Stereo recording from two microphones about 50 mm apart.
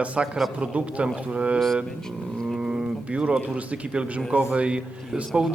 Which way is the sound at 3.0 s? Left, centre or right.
Right.